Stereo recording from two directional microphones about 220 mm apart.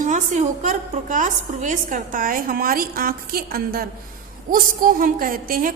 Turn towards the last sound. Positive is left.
turn(degrees=-40)  # may be behind; listen again after turning